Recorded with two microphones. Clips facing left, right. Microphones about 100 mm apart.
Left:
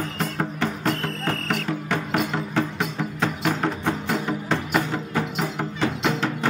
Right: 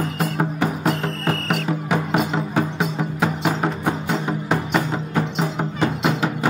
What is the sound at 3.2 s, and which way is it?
Music, 10° right (ahead or behind).